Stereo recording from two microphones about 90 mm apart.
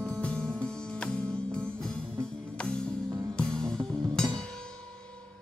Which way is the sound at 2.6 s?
10° left (ahead or behind).